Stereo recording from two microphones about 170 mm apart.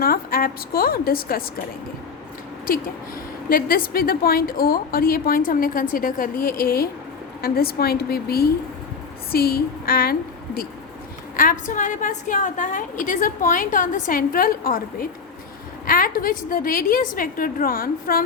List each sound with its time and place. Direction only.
0.0 s a woman's voice: 60° left (ahead or behind)
3.5 s a woman's voice: 60° left (ahead or behind)
15.9 s a woman's voice: 55° left (ahead or behind)